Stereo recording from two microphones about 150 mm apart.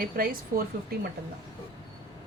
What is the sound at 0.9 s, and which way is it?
Speech, 90° right.